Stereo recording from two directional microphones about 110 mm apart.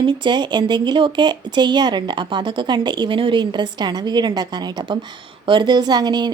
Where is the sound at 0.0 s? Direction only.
45° right (ahead or behind).